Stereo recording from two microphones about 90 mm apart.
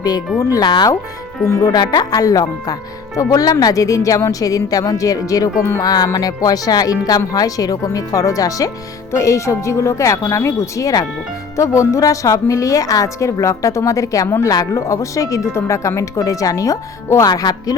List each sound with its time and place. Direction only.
0.3 s a woman's voice: 40° left (ahead or behind)
1.7 s a woman's voice: 50° left (ahead or behind)